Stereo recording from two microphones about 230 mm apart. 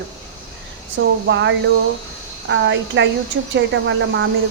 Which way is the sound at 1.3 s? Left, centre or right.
Right.